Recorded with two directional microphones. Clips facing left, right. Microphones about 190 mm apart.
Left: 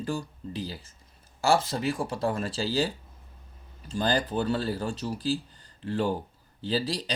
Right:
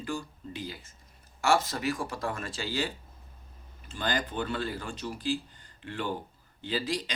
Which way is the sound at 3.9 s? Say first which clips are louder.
Left 5 dB; 40° left (ahead or behind).